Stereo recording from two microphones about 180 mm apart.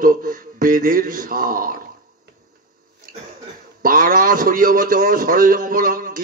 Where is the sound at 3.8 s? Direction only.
50° right (ahead or behind).